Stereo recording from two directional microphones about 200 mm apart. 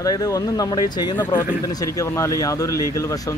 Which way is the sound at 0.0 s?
20° left (ahead or behind).